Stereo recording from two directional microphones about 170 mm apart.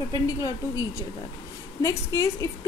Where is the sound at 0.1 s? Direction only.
20° left (ahead or behind).